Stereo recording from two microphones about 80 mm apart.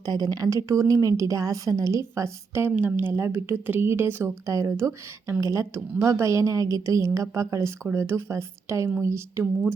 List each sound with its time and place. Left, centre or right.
0.0 s a woman's voice: right
4.4 s a woman's voice: right